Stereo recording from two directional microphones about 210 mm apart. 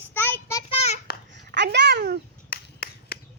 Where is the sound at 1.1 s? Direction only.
45° left (ahead or behind).